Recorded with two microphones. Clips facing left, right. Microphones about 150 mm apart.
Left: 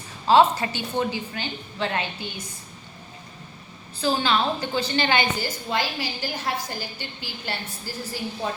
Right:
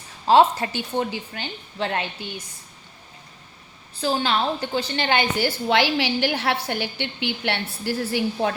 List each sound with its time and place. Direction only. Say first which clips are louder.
0.3 s a woman's voice: right 1 dB; 60° right (ahead or behind)
4.0 s a woman's voice: even; 55° right (ahead or behind)